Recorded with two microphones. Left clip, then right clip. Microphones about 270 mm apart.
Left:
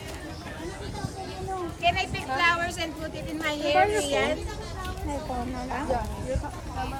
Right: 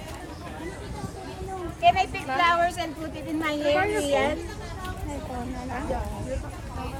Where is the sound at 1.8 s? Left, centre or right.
Centre.